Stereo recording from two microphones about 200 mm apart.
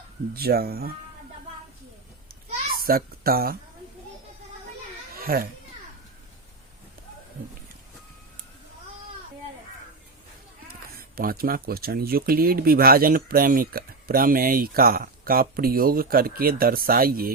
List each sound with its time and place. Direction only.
0.3 s speech: 50° right (ahead or behind)
2.7 s speech: 50° right (ahead or behind)
5.1 s a sound: 45° right (ahead or behind)
10.7 s speech: 50° right (ahead or behind)